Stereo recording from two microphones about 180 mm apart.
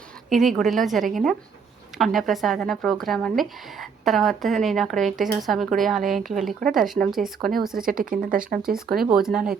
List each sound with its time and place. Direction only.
0.3 s a woman's voice: centre (ahead or behind)
7.9 s speech: 50° right (ahead or behind)
9.0 s speech: 5° right (ahead or behind)